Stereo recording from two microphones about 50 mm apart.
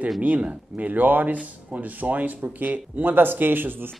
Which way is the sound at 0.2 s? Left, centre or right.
Right.